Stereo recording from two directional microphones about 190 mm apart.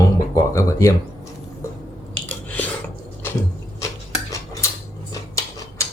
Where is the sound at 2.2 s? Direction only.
10° left (ahead or behind).